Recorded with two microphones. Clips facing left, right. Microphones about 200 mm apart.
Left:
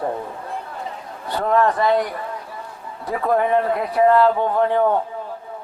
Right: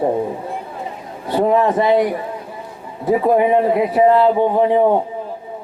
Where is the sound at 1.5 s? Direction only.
5° right (ahead or behind).